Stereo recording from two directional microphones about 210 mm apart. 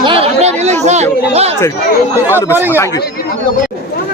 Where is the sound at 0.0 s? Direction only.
25° right (ahead or behind).